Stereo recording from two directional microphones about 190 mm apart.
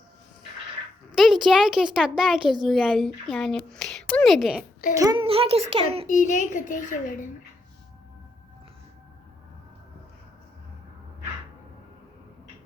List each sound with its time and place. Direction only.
1.1 s speech: centre (ahead or behind)
4.9 s a child's voice: 20° right (ahead or behind)
5.2 s a child's voice: 30° right (ahead or behind)
6.1 s a child's voice: 40° left (ahead or behind)